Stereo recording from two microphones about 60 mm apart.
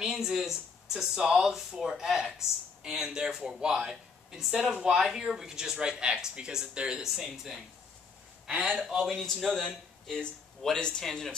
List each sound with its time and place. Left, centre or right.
0.0 s speech: centre
3.9 s a sound: centre
4.7 s speech: centre
8.9 s a man's voice: centre